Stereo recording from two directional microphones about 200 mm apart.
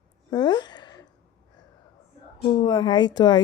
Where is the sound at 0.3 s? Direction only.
20° left (ahead or behind).